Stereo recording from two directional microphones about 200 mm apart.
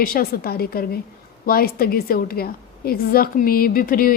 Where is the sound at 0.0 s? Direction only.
50° left (ahead or behind).